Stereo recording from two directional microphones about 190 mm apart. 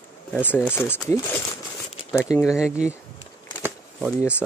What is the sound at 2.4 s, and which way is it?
Speech, 5° right (ahead or behind).